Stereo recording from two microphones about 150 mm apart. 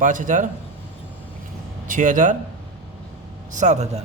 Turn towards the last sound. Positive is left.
turn(degrees=-50)  # may be behind; listen again after turning